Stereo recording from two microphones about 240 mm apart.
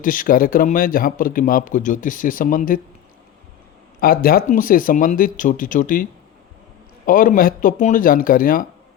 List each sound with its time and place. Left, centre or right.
0.0 s a man's voice: left
4.0 s a man's voice: left